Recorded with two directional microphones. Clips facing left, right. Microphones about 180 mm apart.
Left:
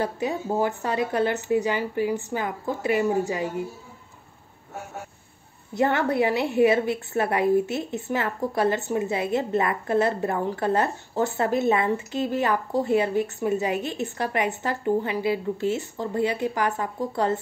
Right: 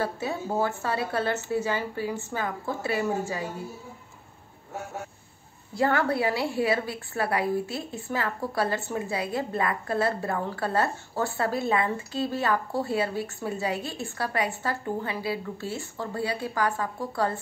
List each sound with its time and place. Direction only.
0.0 s a woman's voice: 15° left (ahead or behind)
5.8 s a woman's voice: 20° left (ahead or behind)